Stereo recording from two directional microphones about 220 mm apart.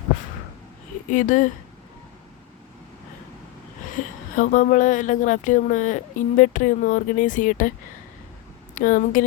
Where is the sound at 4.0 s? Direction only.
35° left (ahead or behind).